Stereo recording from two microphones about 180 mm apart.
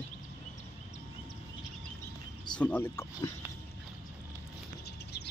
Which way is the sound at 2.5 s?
10° left (ahead or behind).